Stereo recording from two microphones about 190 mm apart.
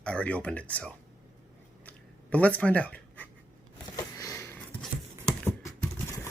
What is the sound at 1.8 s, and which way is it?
Writing, 5° left (ahead or behind).